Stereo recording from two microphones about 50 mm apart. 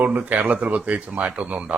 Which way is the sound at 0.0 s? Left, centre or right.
Right.